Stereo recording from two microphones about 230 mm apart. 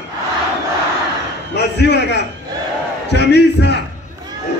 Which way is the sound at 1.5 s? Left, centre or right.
Left.